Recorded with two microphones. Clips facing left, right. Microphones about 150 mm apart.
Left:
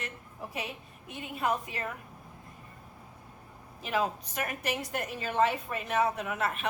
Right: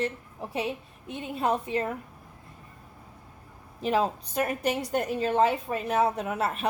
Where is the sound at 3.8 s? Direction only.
30° right (ahead or behind).